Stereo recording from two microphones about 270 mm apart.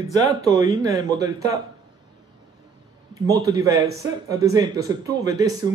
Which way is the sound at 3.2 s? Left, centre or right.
Centre.